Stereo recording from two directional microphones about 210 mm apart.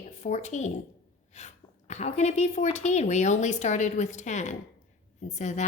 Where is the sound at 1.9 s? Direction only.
30° left (ahead or behind).